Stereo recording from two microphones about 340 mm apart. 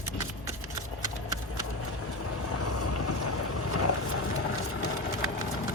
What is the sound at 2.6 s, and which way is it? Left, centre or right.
Boat, left.